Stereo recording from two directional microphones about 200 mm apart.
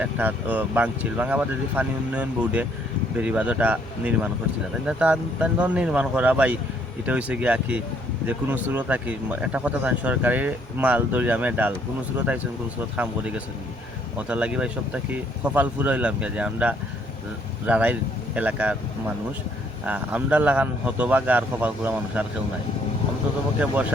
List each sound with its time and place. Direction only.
0.0 s speech: 10° right (ahead or behind)
13.0 s speech: 5° right (ahead or behind)
19.8 s speech: 10° right (ahead or behind)